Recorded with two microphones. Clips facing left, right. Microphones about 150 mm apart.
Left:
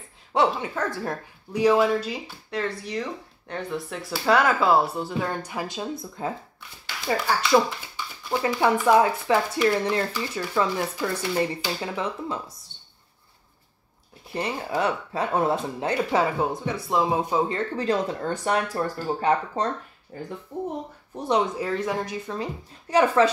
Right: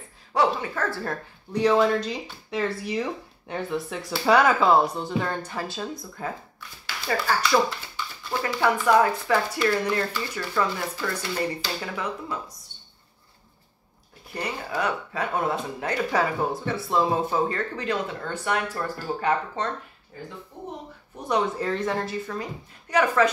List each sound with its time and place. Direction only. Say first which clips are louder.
0.3 s speech: left 1 dB; 20° left (ahead or behind); by 2.6 s 5° left (ahead or behind)
2.6 s speech: right 3 dB; 10° right (ahead or behind); by 12.4 s 25° left (ahead or behind)
12.7 s a sound: right 1 dB; 85° left
14.3 s speech: left 3 dB; 25° left (ahead or behind)
21.5 s speech: even; 10° left (ahead or behind); by 23.3 s 30° left (ahead or behind)